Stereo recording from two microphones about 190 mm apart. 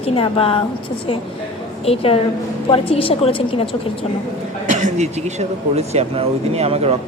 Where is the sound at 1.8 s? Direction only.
30° left (ahead or behind).